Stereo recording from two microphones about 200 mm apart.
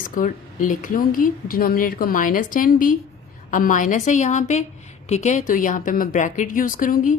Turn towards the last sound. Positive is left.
turn(degrees=40)  # may be behind; listen again after turning